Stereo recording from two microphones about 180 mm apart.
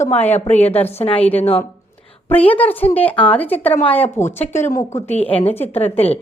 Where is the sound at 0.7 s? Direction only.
10° left (ahead or behind).